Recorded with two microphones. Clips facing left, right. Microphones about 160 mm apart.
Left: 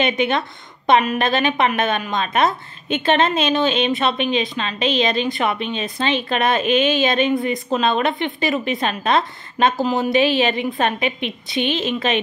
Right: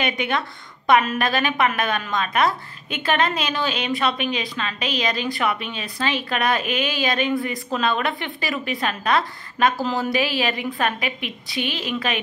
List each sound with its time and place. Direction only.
0.0 s a woman's voice: 25° left (ahead or behind)